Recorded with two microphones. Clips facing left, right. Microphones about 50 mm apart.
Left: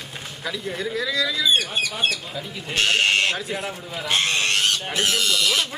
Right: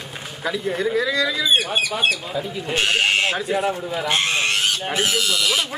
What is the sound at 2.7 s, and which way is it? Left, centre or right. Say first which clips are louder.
Speech: even; centre.